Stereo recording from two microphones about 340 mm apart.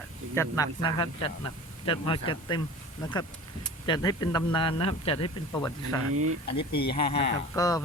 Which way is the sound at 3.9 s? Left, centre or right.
Centre.